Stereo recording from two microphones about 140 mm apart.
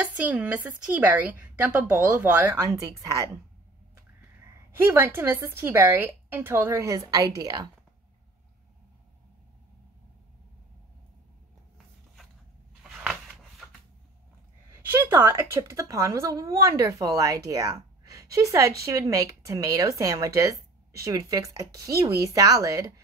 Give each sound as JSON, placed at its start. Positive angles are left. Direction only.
{"t": 0.0, "sound": "a woman's voice", "side_deg": -10}
{"t": 4.7, "sound": "a woman's voice", "side_deg": -15}
{"t": 12.8, "sound": "a sound", "side_deg": -5}
{"t": 14.7, "sound": "speech", "side_deg": -15}